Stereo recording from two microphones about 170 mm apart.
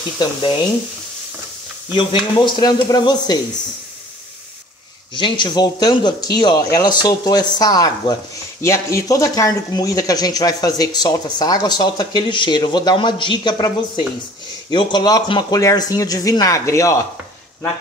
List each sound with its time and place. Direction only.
0.2 s speech: 25° left (ahead or behind)
1.9 s speech: 30° left (ahead or behind)
5.1 s speech: 25° left (ahead or behind)